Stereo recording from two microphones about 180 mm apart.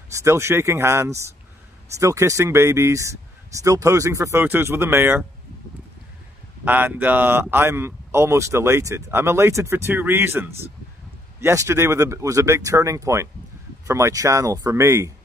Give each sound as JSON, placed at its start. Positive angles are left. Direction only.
{"t": 0.1, "sound": "speech", "side_deg": -15}
{"t": 6.6, "sound": "speech", "side_deg": -10}